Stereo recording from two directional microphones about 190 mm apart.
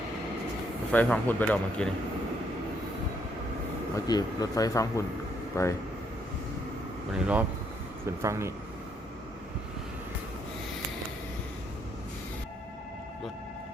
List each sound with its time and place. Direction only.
0.9 s speech: 5° left (ahead or behind)
3.9 s speech: 20° left (ahead or behind)
7.1 s speech: 5° right (ahead or behind)